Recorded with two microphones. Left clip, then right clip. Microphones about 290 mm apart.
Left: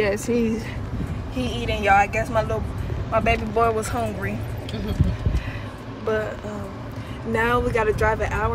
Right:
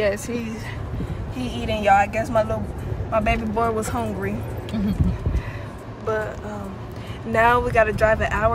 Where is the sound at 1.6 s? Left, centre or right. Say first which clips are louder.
Right 2 dB; right.